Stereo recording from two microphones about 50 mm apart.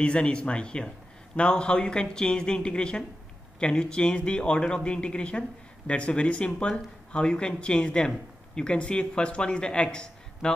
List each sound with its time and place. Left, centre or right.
0.0 s speech: left